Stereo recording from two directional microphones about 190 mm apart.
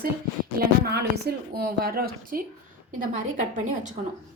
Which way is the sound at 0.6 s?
55° right (ahead or behind).